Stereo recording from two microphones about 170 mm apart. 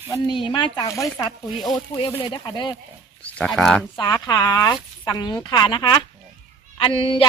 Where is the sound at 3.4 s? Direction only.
Centre (ahead or behind).